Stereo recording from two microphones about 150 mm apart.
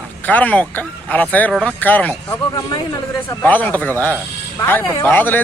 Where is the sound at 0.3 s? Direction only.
10° left (ahead or behind).